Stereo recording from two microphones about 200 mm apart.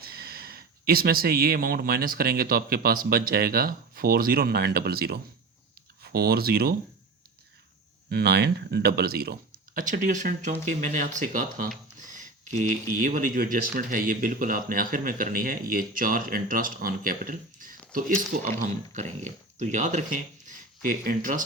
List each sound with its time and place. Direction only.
0.0 s speech: 50° right (ahead or behind)
8.1 s speech: 50° right (ahead or behind)